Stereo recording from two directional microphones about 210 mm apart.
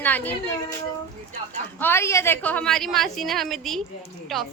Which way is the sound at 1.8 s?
10° left (ahead or behind).